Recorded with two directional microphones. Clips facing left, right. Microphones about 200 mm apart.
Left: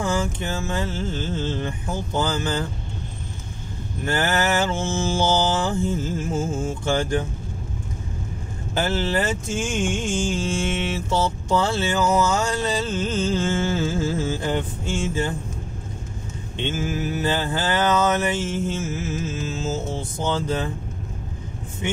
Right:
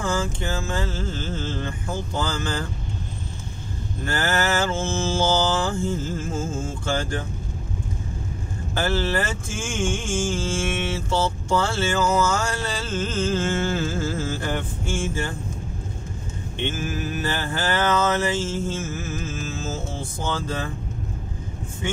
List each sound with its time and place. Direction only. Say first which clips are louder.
0.0 s mantra: left 1 dB; 20° left (ahead or behind)
4.0 s speech: left 2 dB; 20° left (ahead or behind)
8.7 s speech: left 1 dB; 20° left (ahead or behind)
16.6 s mantra: left 2 dB; 20° left (ahead or behind)